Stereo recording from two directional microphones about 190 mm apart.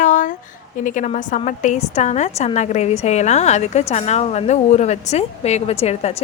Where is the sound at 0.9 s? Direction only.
45° left (ahead or behind).